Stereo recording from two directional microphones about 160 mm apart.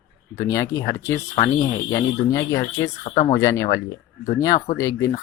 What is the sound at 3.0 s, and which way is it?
Speech, 40° left (ahead or behind).